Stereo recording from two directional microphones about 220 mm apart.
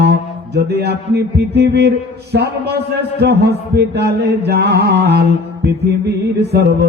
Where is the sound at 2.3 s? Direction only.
50° right (ahead or behind).